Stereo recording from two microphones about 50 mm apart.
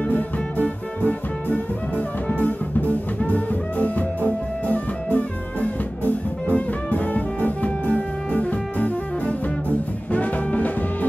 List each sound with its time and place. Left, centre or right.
0.1 s music: left